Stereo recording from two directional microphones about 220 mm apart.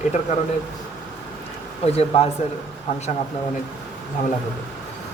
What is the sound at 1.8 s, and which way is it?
Speech, 30° left (ahead or behind).